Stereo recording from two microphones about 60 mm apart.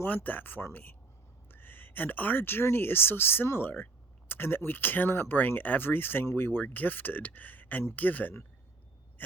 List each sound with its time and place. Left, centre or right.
0.0 s speech: left
1.5 s a sound: left
2.7 s speech: left